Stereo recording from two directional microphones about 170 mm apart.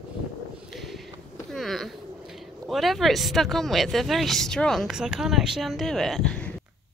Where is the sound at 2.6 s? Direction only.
Centre (ahead or behind).